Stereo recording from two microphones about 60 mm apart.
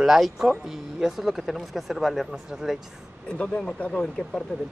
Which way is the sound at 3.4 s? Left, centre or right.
Centre.